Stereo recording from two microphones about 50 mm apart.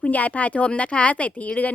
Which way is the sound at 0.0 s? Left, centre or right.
Left.